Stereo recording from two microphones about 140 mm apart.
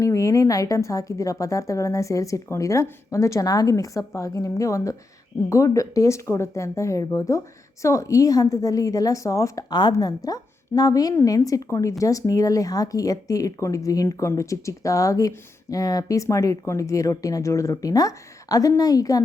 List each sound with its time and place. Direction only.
0.0 s speech: 20° left (ahead or behind)